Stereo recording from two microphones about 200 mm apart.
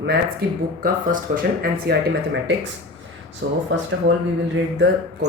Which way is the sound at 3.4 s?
60° right (ahead or behind).